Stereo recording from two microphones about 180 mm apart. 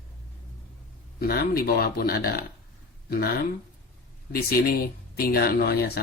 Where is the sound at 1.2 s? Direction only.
60° left (ahead or behind).